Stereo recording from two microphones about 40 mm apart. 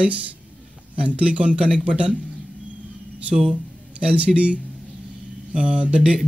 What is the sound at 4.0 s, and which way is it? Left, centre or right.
Speech, right.